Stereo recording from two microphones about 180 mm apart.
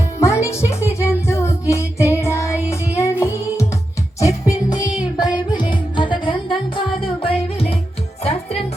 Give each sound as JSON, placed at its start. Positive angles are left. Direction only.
{"t": 0.2, "sound": "music", "side_deg": 15}